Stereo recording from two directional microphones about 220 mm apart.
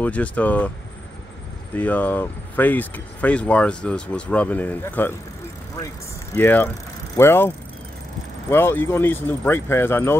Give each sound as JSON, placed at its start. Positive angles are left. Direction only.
{"t": 0.0, "sound": "speech", "side_deg": 5}
{"t": 1.8, "sound": "speech", "side_deg": 5}
{"t": 6.3, "sound": "speech", "side_deg": 10}